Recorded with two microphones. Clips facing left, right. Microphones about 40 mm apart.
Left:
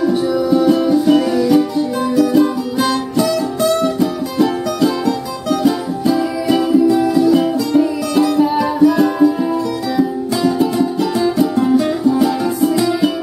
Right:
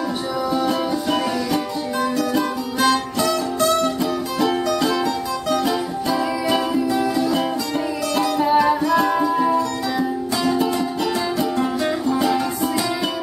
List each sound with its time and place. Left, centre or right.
0.0 s music: centre